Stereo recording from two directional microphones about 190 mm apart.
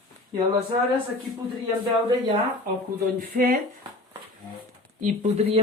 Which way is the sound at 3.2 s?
50° right (ahead or behind).